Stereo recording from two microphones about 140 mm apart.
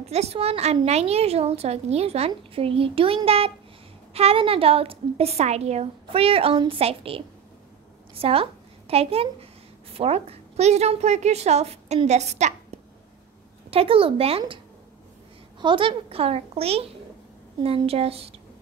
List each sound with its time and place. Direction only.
0.0 s a woman's voice: 50° right (ahead or behind)
15.6 s a woman's voice: 35° right (ahead or behind)